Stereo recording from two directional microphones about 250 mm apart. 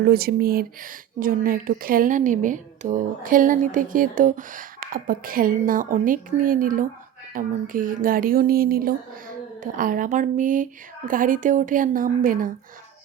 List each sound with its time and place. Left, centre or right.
0.1 s speech: right